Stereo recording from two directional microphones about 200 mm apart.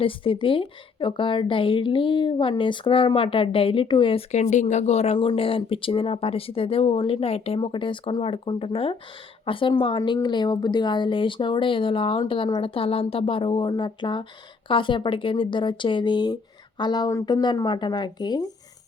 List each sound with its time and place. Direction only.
0.0 s a woman's voice: 25° left (ahead or behind)